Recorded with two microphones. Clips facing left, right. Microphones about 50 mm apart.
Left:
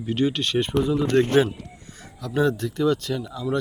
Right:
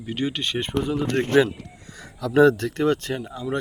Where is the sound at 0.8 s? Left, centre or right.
Right.